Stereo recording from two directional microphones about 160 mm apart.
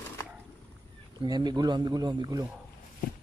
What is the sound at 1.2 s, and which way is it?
Speech, 25° right (ahead or behind).